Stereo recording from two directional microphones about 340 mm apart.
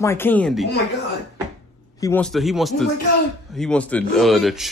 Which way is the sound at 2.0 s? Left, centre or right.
Centre.